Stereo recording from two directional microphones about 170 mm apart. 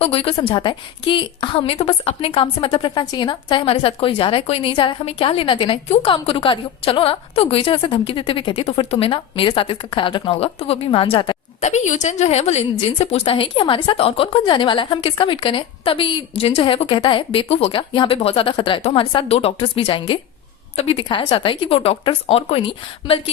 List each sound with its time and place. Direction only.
0.0 s a woman's voice: 35° left (ahead or behind)
11.6 s a woman's voice: 45° left (ahead or behind)